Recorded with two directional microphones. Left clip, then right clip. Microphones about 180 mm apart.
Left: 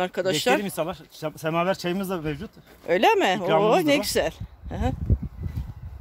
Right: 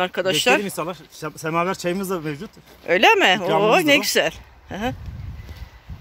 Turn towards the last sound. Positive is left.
turn(degrees=10)  # may be behind; listen again after turning